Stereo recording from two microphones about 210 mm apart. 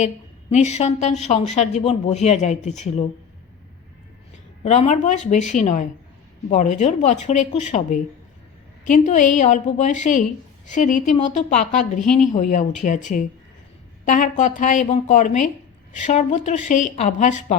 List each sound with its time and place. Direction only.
0.5 s a woman's voice: 30° left (ahead or behind)
4.6 s a woman's voice: 35° left (ahead or behind)